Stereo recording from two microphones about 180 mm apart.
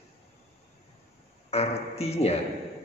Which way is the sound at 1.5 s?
35° left (ahead or behind).